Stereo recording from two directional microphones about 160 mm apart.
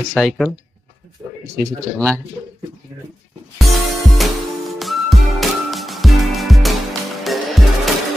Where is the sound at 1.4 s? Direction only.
20° right (ahead or behind).